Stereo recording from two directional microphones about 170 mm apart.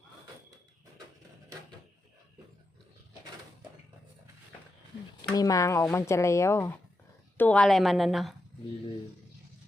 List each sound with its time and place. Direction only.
5.3 s a woman's voice: 20° left (ahead or behind); by 8.4 s centre (ahead or behind)